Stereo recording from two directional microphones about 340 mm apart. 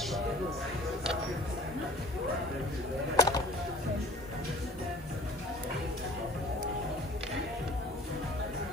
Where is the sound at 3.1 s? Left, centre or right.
Centre.